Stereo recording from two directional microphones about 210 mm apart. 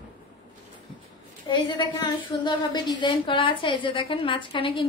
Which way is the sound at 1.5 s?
20° left (ahead or behind).